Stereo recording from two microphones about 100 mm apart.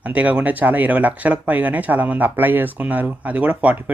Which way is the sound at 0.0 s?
15° right (ahead or behind).